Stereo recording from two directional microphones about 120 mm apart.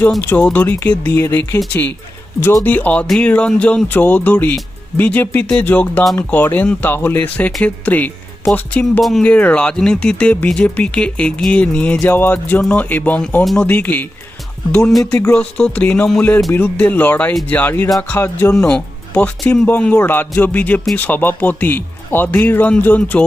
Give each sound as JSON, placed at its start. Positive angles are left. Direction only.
{"t": 0.2, "sound": "speech", "side_deg": 10}
{"t": 2.6, "sound": "speech", "side_deg": 15}
{"t": 14.7, "sound": "speech", "side_deg": 5}